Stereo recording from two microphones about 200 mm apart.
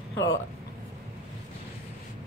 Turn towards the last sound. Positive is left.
turn(degrees=65)  # may be behind; listen again after turning